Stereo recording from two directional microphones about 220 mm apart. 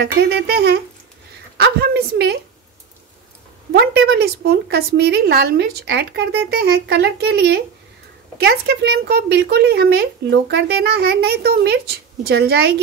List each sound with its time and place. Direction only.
0.0 s a woman's voice: 45° right (ahead or behind)
3.7 s a woman's voice: 50° right (ahead or behind)